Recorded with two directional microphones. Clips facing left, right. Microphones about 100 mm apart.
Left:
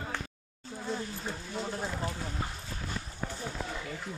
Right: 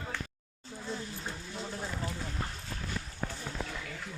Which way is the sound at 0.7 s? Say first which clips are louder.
Left 3 dB; 20° left (ahead or behind).